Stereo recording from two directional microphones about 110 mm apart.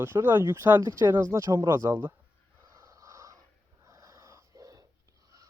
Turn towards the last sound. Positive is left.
turn(degrees=-30)  # may be behind; listen again after turning